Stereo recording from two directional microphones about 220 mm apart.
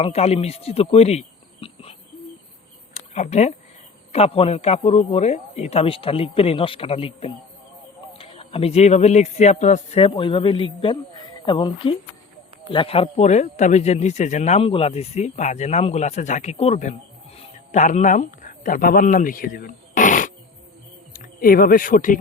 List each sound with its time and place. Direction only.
0.0 s speech: 30° left (ahead or behind)
1.6 s a sound: 25° left (ahead or behind)
4.1 s a man's voice: 25° left (ahead or behind)